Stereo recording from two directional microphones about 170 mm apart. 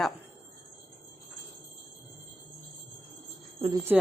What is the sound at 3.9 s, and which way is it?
Speech, 10° right (ahead or behind).